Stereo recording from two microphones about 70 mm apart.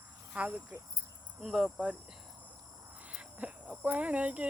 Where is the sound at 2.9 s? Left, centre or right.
Right.